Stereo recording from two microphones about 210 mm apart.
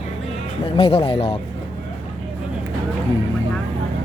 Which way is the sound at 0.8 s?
30° left (ahead or behind).